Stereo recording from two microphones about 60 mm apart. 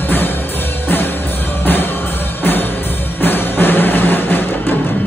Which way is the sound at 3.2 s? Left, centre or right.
Left.